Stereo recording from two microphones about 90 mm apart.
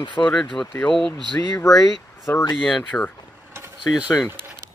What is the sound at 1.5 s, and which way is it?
Speech, 35° left (ahead or behind).